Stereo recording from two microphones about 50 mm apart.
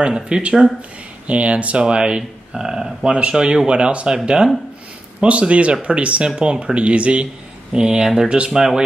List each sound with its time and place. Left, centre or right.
0.0 s speech: centre
5.2 s speech: right; by 8.8 s centre